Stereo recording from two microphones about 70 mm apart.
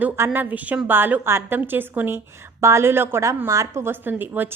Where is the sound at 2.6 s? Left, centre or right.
Right.